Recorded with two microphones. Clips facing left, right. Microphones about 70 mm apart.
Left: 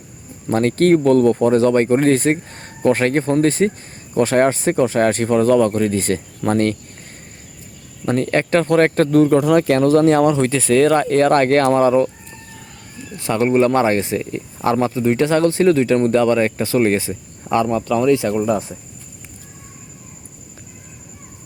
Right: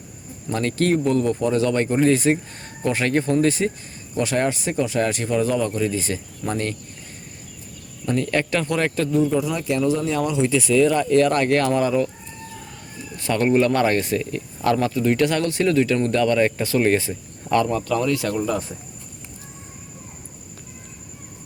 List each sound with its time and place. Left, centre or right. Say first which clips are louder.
0.4 s speech: left 7 dB; left
8.0 s speech: left 4 dB; left
13.1 s speech: left 3 dB; left